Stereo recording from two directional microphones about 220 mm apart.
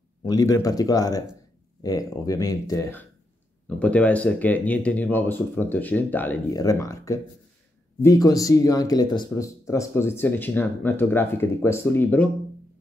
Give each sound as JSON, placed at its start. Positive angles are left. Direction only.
{"t": 0.2, "sound": "speech", "side_deg": 15}